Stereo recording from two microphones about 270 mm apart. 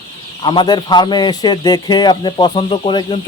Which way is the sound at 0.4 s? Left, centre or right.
Centre.